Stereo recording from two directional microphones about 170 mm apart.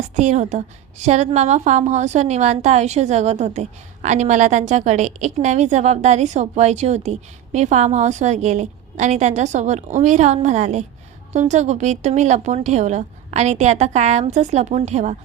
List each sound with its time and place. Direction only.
0.2 s a woman's voice: 40° right (ahead or behind)